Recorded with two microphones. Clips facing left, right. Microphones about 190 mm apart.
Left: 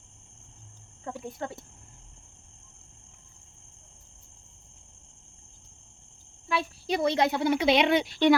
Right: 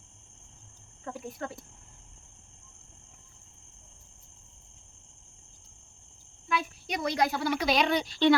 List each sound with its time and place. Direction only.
1.0 s speech: 25° left (ahead or behind)
6.5 s speech: 30° left (ahead or behind)